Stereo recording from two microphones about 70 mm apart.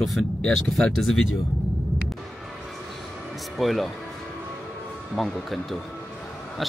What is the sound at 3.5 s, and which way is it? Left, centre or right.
Speech, centre.